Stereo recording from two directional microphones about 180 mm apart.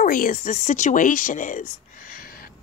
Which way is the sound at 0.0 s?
50° left (ahead or behind).